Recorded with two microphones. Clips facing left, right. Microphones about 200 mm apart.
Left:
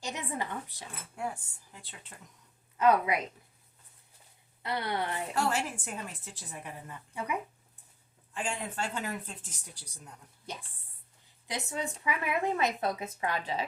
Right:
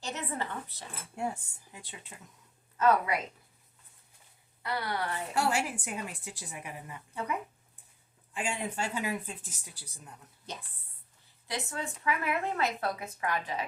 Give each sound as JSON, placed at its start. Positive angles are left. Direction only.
{"t": 0.0, "sound": "speech", "side_deg": 15}
{"t": 1.1, "sound": "speech", "side_deg": -25}
{"t": 2.1, "sound": "a woman's voice", "side_deg": -5}
{"t": 2.7, "sound": "a woman's voice", "side_deg": 15}
{"t": 4.6, "sound": "speech", "side_deg": 20}
{"t": 5.3, "sound": "a woman's voice", "side_deg": -10}
{"t": 7.1, "sound": "speech", "side_deg": 10}
{"t": 8.3, "sound": "a woman's voice", "side_deg": -10}
{"t": 11.4, "sound": "a woman's voice", "side_deg": 20}